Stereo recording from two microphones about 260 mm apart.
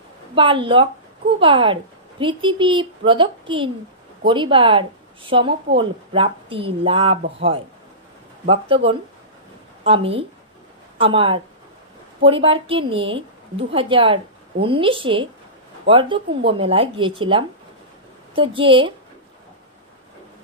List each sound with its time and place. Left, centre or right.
0.3 s speech: centre
8.4 s speech: right